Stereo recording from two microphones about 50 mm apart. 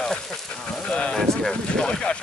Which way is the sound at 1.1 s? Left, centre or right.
Centre.